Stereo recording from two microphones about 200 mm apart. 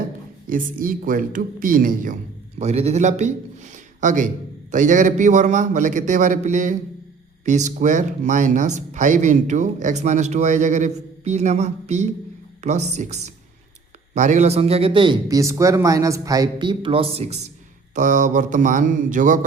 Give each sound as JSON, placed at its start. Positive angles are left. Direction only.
{"t": 0.4, "sound": "speech", "side_deg": -45}
{"t": 2.6, "sound": "a man's voice", "side_deg": -35}